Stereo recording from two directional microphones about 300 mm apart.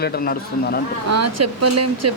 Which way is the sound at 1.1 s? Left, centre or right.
Right.